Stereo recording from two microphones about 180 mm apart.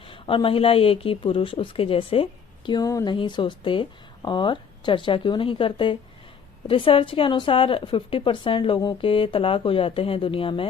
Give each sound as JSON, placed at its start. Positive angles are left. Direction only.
{"t": 0.0, "sound": "a woman's voice", "side_deg": 30}